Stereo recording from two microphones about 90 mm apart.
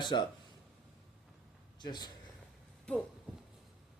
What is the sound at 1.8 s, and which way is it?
Speech, 50° left (ahead or behind).